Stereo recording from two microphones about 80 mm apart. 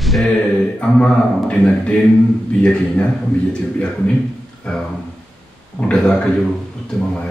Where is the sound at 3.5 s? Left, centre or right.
Centre.